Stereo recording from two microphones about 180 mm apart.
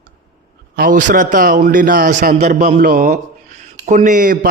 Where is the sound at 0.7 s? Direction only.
50° right (ahead or behind).